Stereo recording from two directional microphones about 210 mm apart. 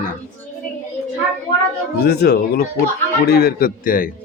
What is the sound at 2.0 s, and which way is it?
Speech, 50° left (ahead or behind).